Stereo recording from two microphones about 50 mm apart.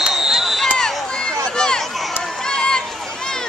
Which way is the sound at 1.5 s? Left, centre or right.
Centre.